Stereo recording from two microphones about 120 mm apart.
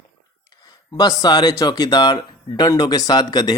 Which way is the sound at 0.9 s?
35° left (ahead or behind).